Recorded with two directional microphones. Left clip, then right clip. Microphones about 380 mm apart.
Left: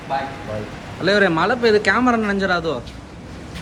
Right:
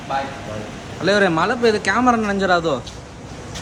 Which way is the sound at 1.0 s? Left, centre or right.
Centre.